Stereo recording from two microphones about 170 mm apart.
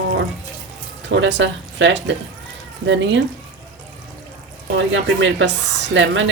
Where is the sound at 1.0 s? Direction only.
90° right.